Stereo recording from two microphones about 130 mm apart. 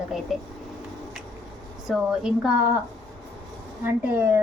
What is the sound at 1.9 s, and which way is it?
Speech, 5° right (ahead or behind).